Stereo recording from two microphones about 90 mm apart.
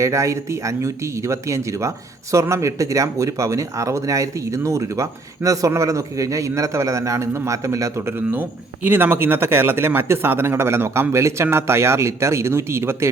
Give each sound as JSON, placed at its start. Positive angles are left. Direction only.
{"t": 0.0, "sound": "speech", "side_deg": -35}
{"t": 8.3, "sound": "speech", "side_deg": -20}